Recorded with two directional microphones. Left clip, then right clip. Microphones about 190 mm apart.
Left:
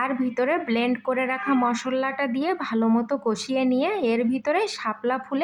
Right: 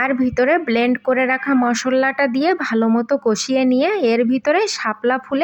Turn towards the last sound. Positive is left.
turn(degrees=-25)  # may be behind; listen again after turning